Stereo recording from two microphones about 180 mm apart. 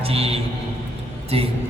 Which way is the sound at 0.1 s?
35° right (ahead or behind).